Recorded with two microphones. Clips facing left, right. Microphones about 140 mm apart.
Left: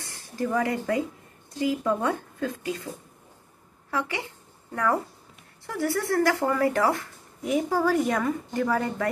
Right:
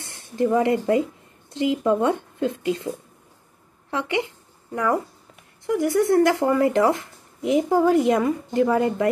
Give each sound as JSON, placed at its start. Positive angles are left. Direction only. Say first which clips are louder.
{"t": 0.0, "sound": "speech", "louder": "right 7 dB", "side_deg": -25}
{"t": 3.9, "sound": "speech", "louder": "right 5 dB", "side_deg": -20}
{"t": 5.7, "sound": "speech", "louder": "right 7 dB", "side_deg": -15}